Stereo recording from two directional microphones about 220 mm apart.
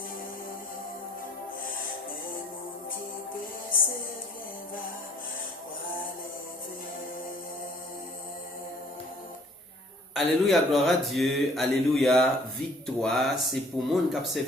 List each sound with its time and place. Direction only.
3.7 s music: 40° left (ahead or behind)
10.2 s speech: centre (ahead or behind)